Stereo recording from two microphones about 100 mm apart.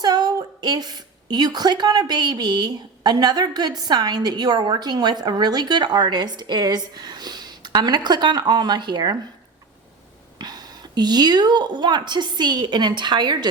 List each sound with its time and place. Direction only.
0.0 s a woman's voice: 45° right (ahead or behind)
10.3 s a woman's voice: 45° right (ahead or behind)